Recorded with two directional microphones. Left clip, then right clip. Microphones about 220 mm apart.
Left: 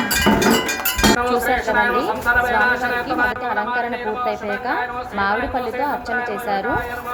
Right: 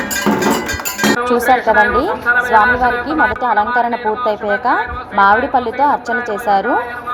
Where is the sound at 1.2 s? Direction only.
20° right (ahead or behind).